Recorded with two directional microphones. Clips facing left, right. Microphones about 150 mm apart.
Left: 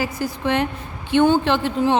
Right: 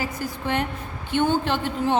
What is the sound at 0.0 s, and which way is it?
A woman's voice, 90° left.